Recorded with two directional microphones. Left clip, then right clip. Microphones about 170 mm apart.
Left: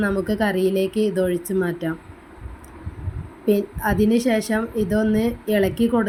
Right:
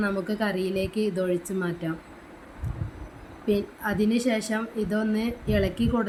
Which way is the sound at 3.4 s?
20° left (ahead or behind).